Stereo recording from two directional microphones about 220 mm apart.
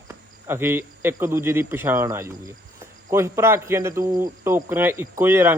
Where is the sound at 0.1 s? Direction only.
10° right (ahead or behind).